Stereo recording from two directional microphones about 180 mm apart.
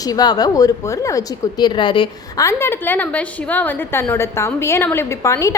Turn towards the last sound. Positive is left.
turn(degrees=15)  # may be behind; listen again after turning